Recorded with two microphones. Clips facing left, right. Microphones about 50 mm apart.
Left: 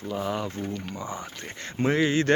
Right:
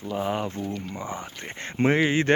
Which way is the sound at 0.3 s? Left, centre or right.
Right.